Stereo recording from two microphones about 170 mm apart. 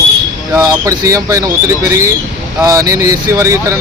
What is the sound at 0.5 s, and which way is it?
Speech, 20° right (ahead or behind).